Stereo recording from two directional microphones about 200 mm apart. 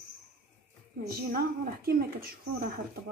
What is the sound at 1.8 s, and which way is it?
Speech, 50° right (ahead or behind).